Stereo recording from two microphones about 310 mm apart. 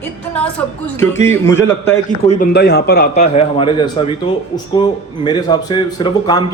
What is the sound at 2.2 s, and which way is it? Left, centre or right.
Speech, left.